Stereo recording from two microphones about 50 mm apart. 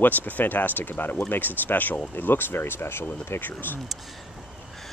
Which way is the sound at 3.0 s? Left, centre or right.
Left.